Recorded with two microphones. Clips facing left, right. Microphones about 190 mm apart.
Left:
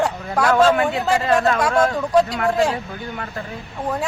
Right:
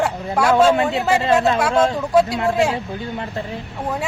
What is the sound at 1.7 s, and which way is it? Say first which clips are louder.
Speech: right 2 dB; 25° right (ahead or behind).